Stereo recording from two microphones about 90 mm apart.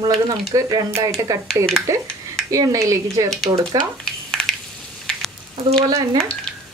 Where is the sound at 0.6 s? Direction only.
40° right (ahead or behind).